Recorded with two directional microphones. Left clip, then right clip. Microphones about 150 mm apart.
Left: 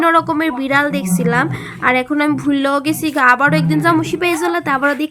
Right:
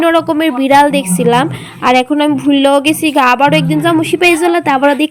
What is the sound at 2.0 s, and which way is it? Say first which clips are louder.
Speech: right 4 dB; 10° right (ahead or behind).